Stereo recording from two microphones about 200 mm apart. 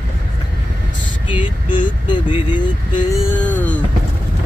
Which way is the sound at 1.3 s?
25° left (ahead or behind).